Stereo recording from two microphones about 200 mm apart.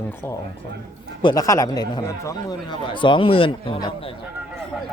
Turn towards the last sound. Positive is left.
turn(degrees=25)  # may be behind; listen again after turning